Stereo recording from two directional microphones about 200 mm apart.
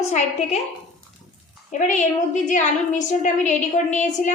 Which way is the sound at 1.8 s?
35° left (ahead or behind).